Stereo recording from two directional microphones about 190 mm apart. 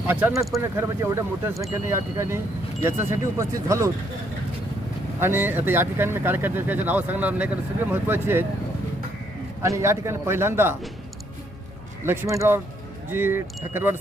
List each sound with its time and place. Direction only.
0.1 s speech: 10° right (ahead or behind)
5.2 s speech: 10° right (ahead or behind)
9.6 s speech: 15° right (ahead or behind)
12.0 s speech: 15° right (ahead or behind)